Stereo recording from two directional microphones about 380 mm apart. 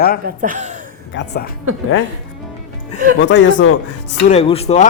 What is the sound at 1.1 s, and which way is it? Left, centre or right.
Speech, left.